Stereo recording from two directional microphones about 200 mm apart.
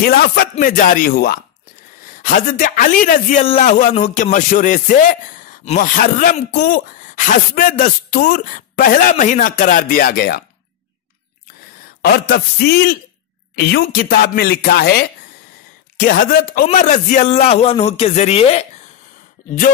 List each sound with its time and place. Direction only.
0.0 s a man's voice: 50° left (ahead or behind)
6.5 s speech: 55° left (ahead or behind)
12.0 s speech: 55° left (ahead or behind)
16.6 s a man's voice: 40° left (ahead or behind)